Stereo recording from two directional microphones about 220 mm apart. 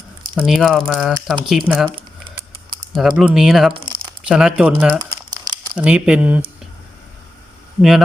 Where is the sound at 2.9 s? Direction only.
Centre (ahead or behind).